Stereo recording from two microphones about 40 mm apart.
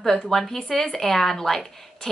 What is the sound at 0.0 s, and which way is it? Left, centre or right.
Speech, centre.